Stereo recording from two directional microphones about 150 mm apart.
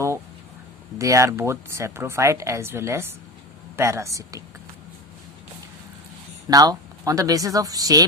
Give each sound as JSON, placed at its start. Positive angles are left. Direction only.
{"t": 0.9, "sound": "speech", "side_deg": -20}
{"t": 6.5, "sound": "speech", "side_deg": -25}